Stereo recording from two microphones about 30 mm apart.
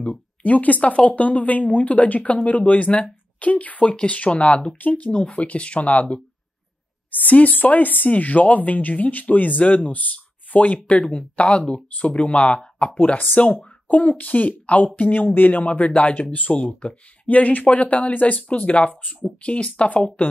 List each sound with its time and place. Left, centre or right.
0.4 s speech: left
4.0 s speech: left
4.9 s speech: left
7.1 s speech: left
13.8 s speech: left
15.6 s speech: left
16.5 s speech: left
17.3 s speech: left
18.5 s speech: left